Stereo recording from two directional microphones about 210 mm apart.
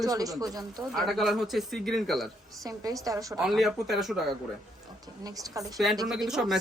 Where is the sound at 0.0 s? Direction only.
15° right (ahead or behind).